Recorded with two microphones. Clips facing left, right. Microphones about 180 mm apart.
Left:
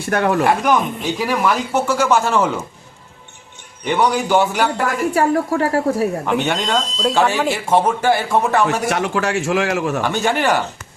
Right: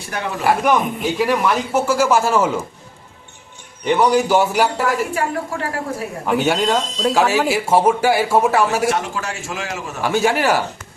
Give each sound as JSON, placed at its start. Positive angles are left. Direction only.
{"t": 0.1, "sound": "speech", "side_deg": 60}
{"t": 0.4, "sound": "speech", "side_deg": 0}
{"t": 3.8, "sound": "speech", "side_deg": 0}
{"t": 5.1, "sound": "a woman's voice", "side_deg": 40}
{"t": 6.2, "sound": "speech", "side_deg": -5}
{"t": 8.9, "sound": "a man's voice", "side_deg": 65}
{"t": 10.0, "sound": "speech", "side_deg": -5}